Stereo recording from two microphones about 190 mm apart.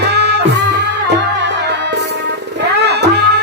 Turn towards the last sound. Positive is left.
turn(degrees=-60)  # may be behind; listen again after turning